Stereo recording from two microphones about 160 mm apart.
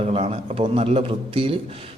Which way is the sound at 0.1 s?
40° right (ahead or behind).